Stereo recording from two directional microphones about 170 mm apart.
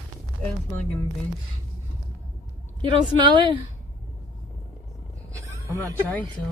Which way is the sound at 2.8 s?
25° right (ahead or behind).